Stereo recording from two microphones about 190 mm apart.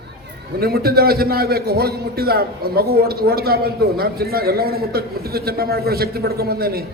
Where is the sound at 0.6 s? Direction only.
55° right (ahead or behind).